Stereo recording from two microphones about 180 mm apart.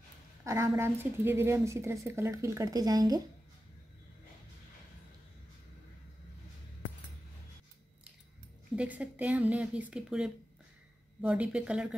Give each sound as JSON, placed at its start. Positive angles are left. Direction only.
{"t": 0.5, "sound": "a woman's voice", "side_deg": -15}
{"t": 8.7, "sound": "a woman's voice", "side_deg": -10}